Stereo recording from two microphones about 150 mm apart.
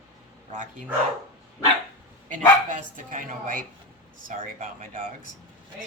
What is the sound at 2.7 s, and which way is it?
Speech, 60° right (ahead or behind).